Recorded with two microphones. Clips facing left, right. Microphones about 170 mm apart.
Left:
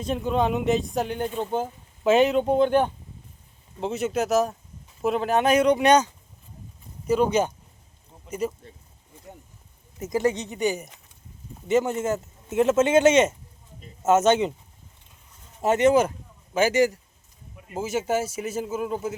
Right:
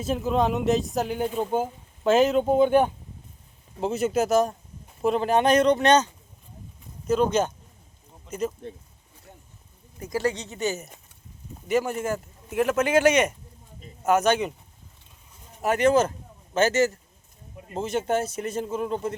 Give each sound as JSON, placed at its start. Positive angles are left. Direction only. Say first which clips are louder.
{"t": 0.0, "sound": "speech", "louder": "even", "side_deg": 0}
{"t": 7.1, "sound": "speech", "louder": "left 1 dB", "side_deg": 10}
{"t": 10.0, "sound": "a man's voice", "louder": "left 3 dB", "side_deg": 20}
{"t": 15.6, "sound": "a man's voice", "louder": "left 1 dB", "side_deg": 25}